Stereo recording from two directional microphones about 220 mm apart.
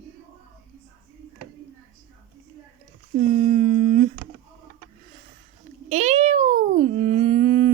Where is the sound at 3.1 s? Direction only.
30° right (ahead or behind).